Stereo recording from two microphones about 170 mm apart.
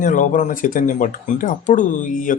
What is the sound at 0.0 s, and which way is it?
Speech, 50° left (ahead or behind).